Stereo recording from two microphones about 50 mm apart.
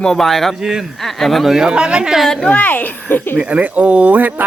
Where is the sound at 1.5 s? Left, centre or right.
Centre.